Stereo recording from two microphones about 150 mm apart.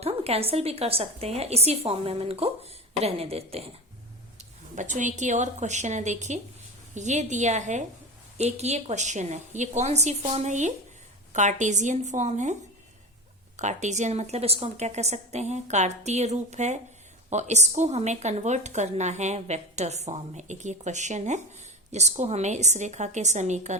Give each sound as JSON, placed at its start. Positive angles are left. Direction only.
{"t": 0.0, "sound": "a woman's voice", "side_deg": -40}
{"t": 4.4, "sound": "a woman's voice", "side_deg": -55}
{"t": 13.6, "sound": "speech", "side_deg": -50}